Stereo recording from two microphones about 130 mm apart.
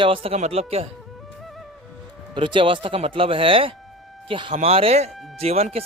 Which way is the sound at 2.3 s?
40° right (ahead or behind).